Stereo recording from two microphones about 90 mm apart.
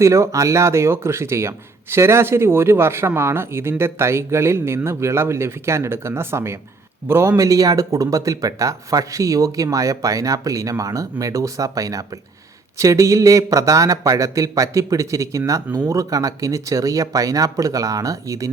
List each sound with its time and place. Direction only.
0.0 s speech: 35° right (ahead or behind)